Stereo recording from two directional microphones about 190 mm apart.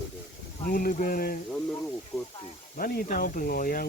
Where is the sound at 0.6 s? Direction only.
50° left (ahead or behind).